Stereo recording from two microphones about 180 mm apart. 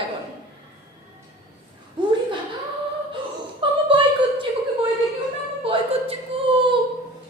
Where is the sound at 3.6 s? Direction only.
30° right (ahead or behind).